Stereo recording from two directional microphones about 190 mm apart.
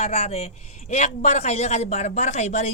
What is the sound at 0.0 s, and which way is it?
Speech, 35° left (ahead or behind).